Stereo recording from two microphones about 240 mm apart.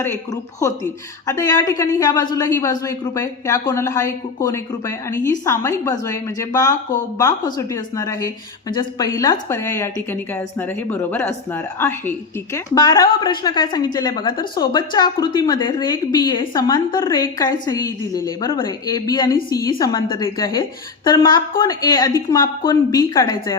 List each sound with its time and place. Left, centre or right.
1.3 s a woman's voice: centre